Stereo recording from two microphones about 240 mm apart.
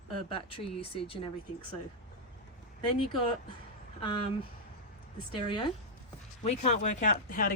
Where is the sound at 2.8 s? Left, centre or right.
Centre.